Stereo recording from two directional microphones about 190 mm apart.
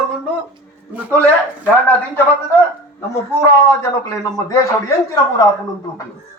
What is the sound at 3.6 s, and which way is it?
Speech, 15° left (ahead or behind).